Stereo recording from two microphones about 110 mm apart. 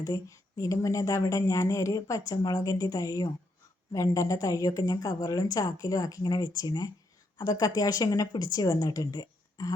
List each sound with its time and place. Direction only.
0.0 s speech: 35° left (ahead or behind)